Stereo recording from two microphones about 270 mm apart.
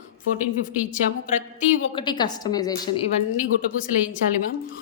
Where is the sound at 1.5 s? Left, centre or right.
Centre.